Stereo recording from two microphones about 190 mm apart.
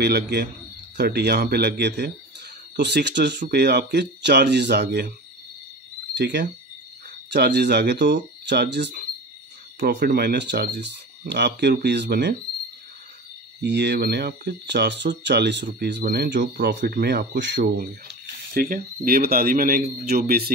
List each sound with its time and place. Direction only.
0.0 s speech: 60° right (ahead or behind)
6.1 s speech: 65° right (ahead or behind)
13.6 s speech: 65° right (ahead or behind)